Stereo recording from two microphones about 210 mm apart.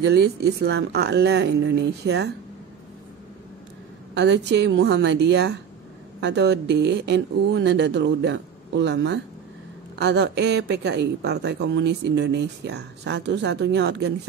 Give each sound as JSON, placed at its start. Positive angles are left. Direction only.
{"t": 0.0, "sound": "a woman's voice", "side_deg": -50}
{"t": 4.1, "sound": "a woman's voice", "side_deg": -55}